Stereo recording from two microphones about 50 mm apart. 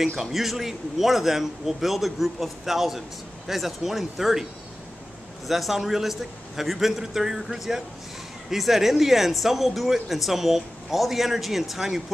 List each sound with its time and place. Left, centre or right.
0.0 s speech: centre
5.5 s speech: centre